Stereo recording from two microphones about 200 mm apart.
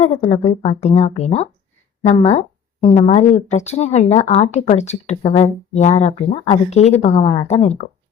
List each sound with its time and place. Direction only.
0.0 s speech: 35° left (ahead or behind)